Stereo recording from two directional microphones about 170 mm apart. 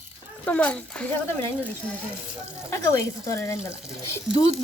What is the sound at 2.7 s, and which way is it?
Speech, 15° left (ahead or behind).